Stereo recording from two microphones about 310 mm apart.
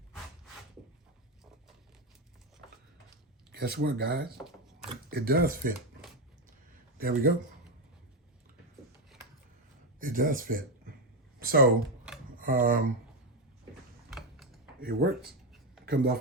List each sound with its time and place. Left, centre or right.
3.5 s speech: right
7.0 s speech: right
10.0 s speech: right
11.3 s a sound: right
12.4 s speech: right
14.1 s typing: centre
14.8 s speech: right
15.2 s a sound: centre
15.9 s speech: right